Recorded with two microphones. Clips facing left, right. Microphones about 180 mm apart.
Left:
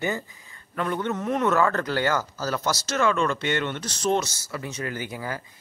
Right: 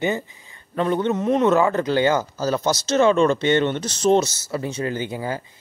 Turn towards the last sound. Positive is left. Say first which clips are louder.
# right 6 dB
turn(degrees=-25)  # may be behind; listen again after turning